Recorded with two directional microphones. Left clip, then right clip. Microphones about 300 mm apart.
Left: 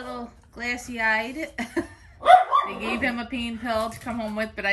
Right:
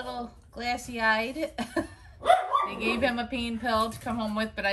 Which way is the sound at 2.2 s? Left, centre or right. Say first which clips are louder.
Left 7 dB; centre.